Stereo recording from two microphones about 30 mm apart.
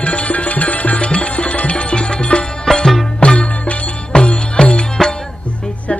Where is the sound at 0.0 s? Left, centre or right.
Left.